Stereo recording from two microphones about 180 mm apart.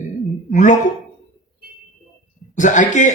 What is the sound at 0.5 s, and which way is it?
Speech, 45° left (ahead or behind).